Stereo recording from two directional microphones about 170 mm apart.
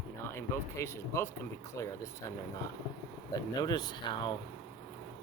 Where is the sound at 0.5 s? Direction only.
15° left (ahead or behind).